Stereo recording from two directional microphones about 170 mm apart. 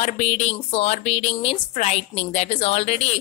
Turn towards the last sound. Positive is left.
turn(degrees=40)  # may be behind; listen again after turning